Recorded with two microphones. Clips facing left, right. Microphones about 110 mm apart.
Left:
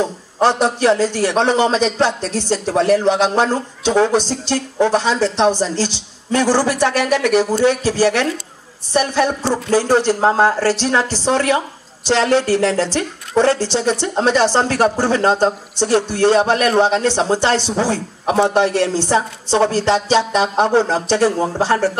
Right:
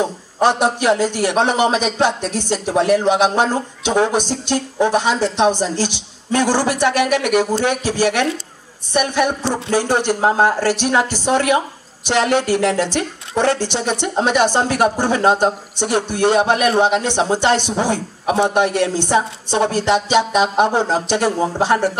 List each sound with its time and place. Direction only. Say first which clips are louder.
0.0 s speech: even; 15° right (ahead or behind)